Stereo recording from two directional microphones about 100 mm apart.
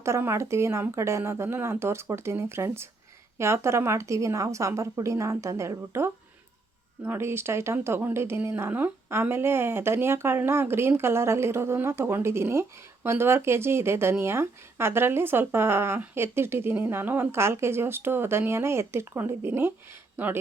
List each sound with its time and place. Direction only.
0.0 s speech: 25° right (ahead or behind)